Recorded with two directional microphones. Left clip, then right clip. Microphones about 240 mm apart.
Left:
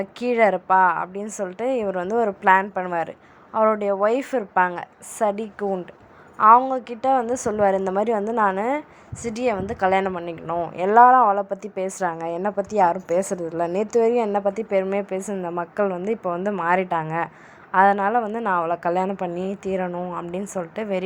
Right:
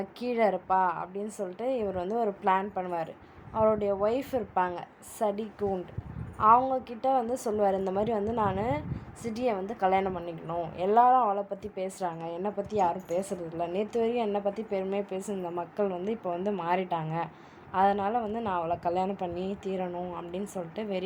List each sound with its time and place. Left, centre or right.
0.0 s a woman's voice: left